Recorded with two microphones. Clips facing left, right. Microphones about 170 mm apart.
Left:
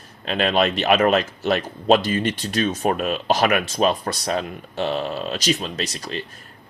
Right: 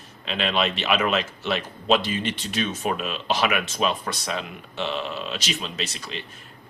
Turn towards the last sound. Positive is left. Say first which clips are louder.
# left 4 dB
turn(degrees=40)  # may be behind; listen again after turning